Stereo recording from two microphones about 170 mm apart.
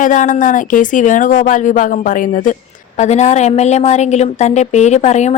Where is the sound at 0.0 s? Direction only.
50° left (ahead or behind).